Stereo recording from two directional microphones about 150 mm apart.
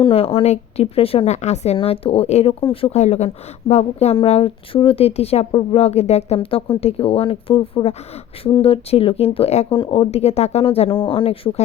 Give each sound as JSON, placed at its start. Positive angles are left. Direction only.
{"t": 0.0, "sound": "a woman's voice", "side_deg": 40}